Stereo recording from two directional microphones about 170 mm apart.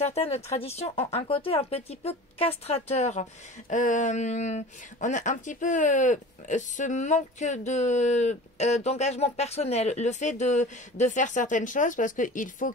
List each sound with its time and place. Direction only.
0.0 s speech: 40° left (ahead or behind)